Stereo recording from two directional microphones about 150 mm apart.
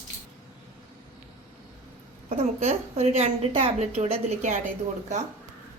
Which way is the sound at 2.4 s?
45° right (ahead or behind).